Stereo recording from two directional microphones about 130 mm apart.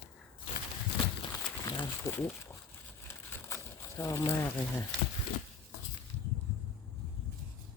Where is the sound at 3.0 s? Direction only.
20° left (ahead or behind).